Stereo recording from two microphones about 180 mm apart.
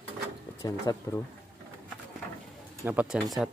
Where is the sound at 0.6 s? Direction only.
20° left (ahead or behind).